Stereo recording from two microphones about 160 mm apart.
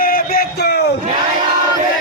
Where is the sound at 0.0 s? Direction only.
65° left (ahead or behind).